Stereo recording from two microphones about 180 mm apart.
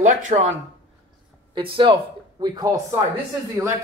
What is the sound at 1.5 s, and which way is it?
Speech, 30° right (ahead or behind).